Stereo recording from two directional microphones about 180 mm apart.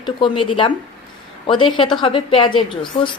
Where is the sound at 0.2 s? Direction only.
25° left (ahead or behind).